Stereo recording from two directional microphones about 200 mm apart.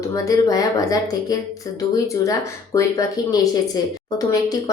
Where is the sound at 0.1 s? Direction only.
15° left (ahead or behind).